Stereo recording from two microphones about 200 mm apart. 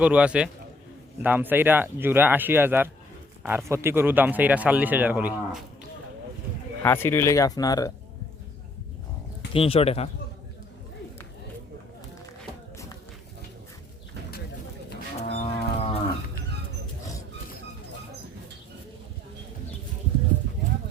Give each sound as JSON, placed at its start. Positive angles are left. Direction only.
{"t": 0.0, "sound": "a man's voice", "side_deg": -5}
{"t": 6.8, "sound": "speech", "side_deg": 10}
{"t": 9.5, "sound": "speech", "side_deg": 30}
{"t": 15.3, "sound": "livestock", "side_deg": 30}